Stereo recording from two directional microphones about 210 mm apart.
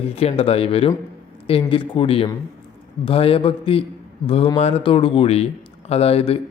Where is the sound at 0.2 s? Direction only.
30° left (ahead or behind).